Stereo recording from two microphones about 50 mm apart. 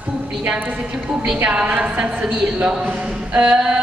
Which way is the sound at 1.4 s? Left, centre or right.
Right.